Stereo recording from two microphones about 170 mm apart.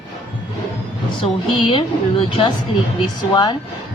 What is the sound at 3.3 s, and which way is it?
Speech, 25° left (ahead or behind).